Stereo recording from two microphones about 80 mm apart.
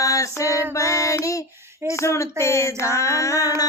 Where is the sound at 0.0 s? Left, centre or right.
Left.